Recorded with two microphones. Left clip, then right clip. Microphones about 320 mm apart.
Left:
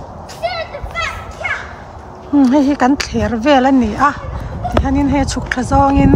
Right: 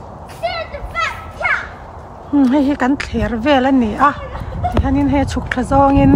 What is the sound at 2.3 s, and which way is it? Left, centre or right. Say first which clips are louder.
Speech: left 2 dB; centre.